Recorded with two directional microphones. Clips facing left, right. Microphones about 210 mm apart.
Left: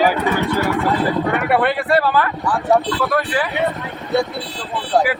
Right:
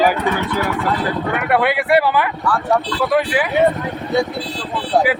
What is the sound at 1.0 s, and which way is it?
Speech, centre (ahead or behind).